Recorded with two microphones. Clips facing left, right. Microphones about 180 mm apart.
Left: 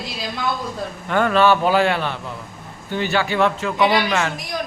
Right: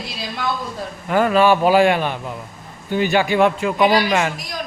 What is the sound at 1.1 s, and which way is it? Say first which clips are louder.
Speech: right 2 dB; 10° right (ahead or behind).